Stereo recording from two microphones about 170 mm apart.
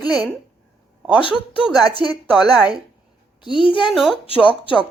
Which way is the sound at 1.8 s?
25° left (ahead or behind).